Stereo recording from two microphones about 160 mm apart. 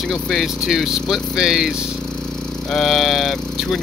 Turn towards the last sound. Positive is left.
turn(degrees=0)  # may be behind; listen again after turning